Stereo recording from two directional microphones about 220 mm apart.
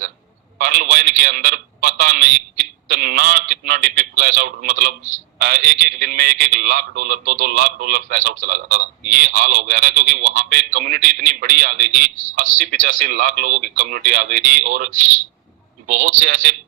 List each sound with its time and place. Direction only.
0.6 s a man's voice: 40° right (ahead or behind)
15.9 s a man's voice: 35° right (ahead or behind)